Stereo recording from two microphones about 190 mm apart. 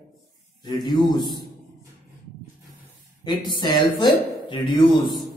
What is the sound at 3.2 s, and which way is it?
Speech, 20° left (ahead or behind).